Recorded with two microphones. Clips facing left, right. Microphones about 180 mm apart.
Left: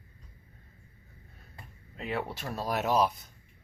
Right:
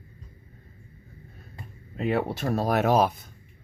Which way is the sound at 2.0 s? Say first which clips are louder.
Right 8 dB; 50° right (ahead or behind).